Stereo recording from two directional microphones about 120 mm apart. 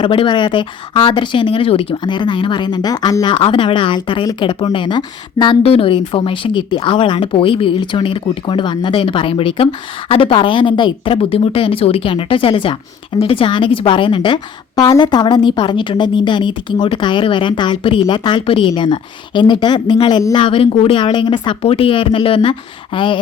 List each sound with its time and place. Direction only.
0.0 s a woman's voice: 45° left (ahead or behind)
3.3 s a woman's voice: 45° left (ahead or behind)
5.6 s a woman's voice: 50° left (ahead or behind)
21.6 s speech: 50° left (ahead or behind)